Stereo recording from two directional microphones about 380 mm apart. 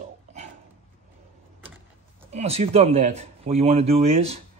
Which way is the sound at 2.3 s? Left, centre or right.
Centre.